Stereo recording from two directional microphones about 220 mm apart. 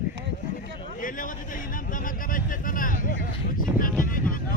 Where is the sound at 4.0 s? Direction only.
40° left (ahead or behind).